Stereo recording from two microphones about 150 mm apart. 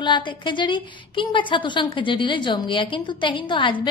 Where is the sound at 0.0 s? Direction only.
30° left (ahead or behind).